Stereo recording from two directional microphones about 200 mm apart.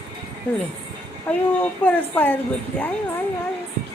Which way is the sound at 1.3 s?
10° left (ahead or behind).